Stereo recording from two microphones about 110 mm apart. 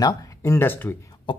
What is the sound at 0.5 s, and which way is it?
Speech, 20° left (ahead or behind).